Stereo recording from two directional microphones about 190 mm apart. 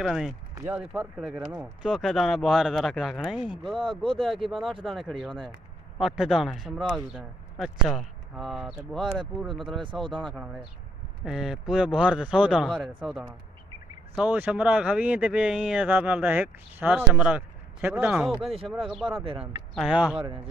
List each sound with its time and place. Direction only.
0.0 s speech: centre (ahead or behind)
9.0 s speech: 25° right (ahead or behind)
10.2 s speech: centre (ahead or behind)
19.2 s speech: 30° right (ahead or behind)
19.7 s speech: 5° right (ahead or behind)
20.2 s speech: 30° right (ahead or behind)